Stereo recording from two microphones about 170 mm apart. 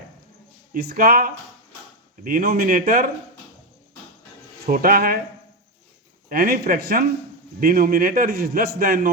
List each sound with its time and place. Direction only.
0.7 s a man's voice: 65° right (ahead or behind)
4.6 s a man's voice: 60° right (ahead or behind)
6.2 s a man's voice: 60° right (ahead or behind)